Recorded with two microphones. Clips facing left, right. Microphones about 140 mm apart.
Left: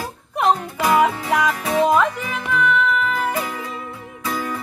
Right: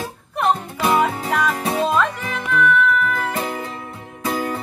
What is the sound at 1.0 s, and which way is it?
Music, 10° left (ahead or behind).